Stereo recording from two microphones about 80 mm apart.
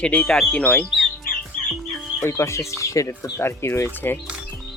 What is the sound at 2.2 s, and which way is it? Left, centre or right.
Speech, left.